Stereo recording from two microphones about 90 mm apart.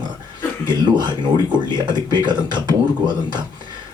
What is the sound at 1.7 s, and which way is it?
Speech, 55° right (ahead or behind).